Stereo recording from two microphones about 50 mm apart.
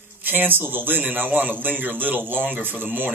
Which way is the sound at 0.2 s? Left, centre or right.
Right.